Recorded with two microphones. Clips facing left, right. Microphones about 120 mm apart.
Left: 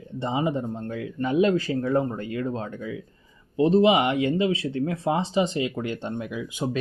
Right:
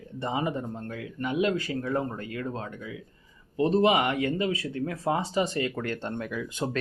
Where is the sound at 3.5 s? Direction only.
20° left (ahead or behind).